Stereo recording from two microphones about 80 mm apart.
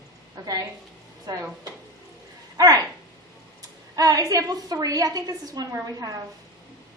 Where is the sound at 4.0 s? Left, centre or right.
Right.